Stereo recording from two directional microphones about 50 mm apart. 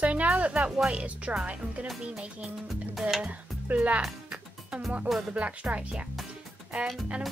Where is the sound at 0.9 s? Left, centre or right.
Right.